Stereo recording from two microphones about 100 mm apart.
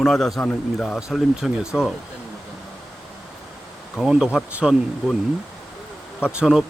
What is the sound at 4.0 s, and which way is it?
Speech, 5° right (ahead or behind).